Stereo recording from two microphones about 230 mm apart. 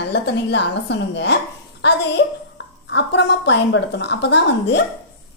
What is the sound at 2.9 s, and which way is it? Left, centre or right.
Speech, left.